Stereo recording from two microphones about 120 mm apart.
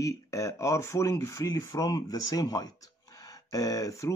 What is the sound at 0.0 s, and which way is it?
Speech, 25° left (ahead or behind).